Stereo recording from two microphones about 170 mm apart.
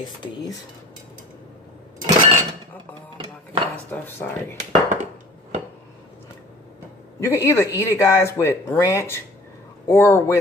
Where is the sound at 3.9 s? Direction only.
10° left (ahead or behind).